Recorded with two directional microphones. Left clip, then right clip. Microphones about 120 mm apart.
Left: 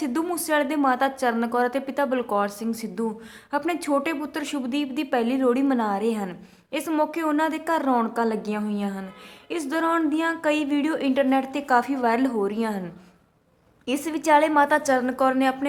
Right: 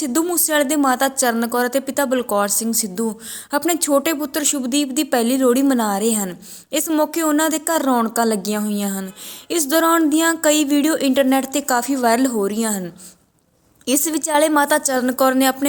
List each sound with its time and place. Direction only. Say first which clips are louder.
0.0 s a woman's voice: right 6 dB; 35° right (ahead or behind)
9.5 s music: right 8 dB; 50° right (ahead or behind)